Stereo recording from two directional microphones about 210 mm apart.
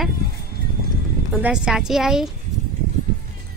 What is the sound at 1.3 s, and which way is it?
Speech, 5° right (ahead or behind).